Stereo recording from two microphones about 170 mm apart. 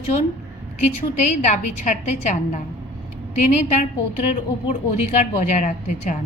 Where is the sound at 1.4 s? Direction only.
45° left (ahead or behind).